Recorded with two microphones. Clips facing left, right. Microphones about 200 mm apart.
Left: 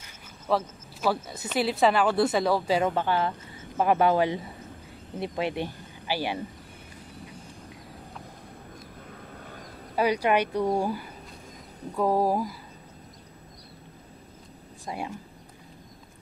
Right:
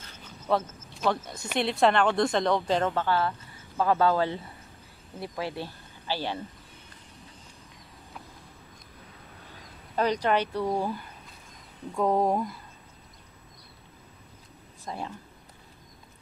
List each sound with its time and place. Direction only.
0.0 s speech: 5° left (ahead or behind)
9.9 s speech: 10° left (ahead or behind)
14.9 s speech: 15° left (ahead or behind)